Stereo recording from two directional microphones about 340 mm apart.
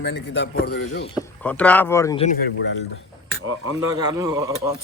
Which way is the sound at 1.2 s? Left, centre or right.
Centre.